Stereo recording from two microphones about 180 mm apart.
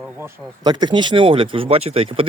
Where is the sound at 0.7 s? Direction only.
25° right (ahead or behind).